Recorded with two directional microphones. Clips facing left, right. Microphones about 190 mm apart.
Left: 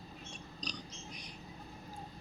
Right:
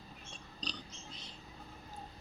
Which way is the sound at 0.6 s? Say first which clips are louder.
Even; 15° left (ahead or behind).